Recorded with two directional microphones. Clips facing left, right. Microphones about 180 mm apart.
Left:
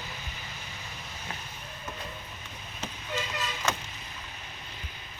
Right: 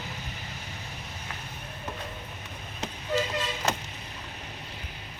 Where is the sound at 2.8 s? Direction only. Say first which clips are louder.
Right 7 dB; 35° right (ahead or behind).